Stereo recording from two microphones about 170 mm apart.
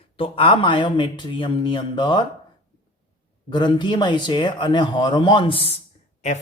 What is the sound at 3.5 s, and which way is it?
Speech, 25° left (ahead or behind).